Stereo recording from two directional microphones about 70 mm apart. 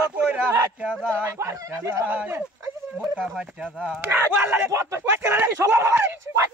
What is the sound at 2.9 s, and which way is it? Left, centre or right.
Speech, centre.